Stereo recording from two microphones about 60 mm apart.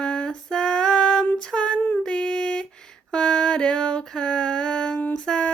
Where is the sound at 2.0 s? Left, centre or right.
Centre.